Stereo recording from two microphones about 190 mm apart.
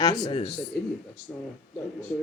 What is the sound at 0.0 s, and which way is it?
Speech, 20° left (ahead or behind).